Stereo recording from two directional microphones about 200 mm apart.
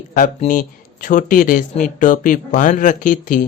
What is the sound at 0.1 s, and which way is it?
Speech, 40° left (ahead or behind).